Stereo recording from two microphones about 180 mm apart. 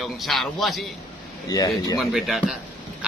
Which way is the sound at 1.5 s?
20° left (ahead or behind).